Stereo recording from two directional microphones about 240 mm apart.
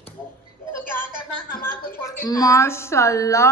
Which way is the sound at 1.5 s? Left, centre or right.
Left.